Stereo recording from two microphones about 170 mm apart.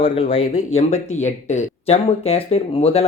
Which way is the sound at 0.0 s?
50° left (ahead or behind).